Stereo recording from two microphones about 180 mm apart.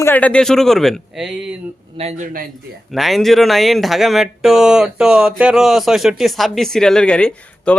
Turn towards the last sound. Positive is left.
turn(degrees=5)  # may be behind; listen again after turning